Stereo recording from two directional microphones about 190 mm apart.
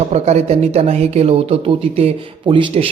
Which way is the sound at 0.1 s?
35° right (ahead or behind).